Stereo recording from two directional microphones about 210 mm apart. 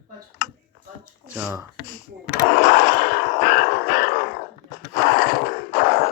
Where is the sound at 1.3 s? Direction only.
10° right (ahead or behind).